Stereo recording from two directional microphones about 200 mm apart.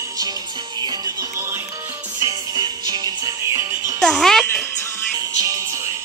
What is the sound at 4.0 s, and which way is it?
Music, centre (ahead or behind).